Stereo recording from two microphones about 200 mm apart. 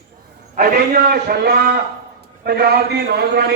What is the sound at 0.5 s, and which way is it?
A man's voice, 50° right (ahead or behind).